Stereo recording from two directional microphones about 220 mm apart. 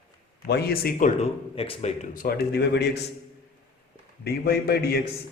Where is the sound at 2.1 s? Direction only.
45° left (ahead or behind).